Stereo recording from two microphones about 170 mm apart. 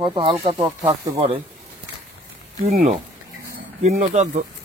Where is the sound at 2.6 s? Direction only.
50° right (ahead or behind).